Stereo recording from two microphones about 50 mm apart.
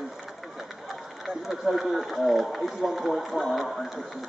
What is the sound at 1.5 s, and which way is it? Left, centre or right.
Speech, centre.